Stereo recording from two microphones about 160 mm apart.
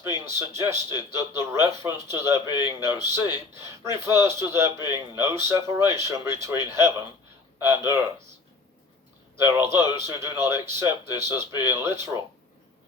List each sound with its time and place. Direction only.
0.0 s a man's voice: 15° right (ahead or behind)
9.4 s a man's voice: 15° right (ahead or behind)